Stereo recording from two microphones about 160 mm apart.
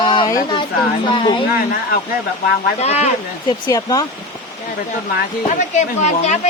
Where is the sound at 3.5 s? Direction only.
25° left (ahead or behind).